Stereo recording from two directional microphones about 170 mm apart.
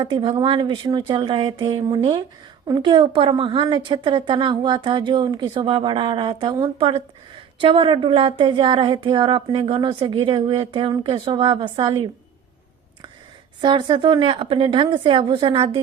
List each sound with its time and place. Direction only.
0.0 s a woman's voice: 30° right (ahead or behind)
13.6 s a woman's voice: 25° right (ahead or behind)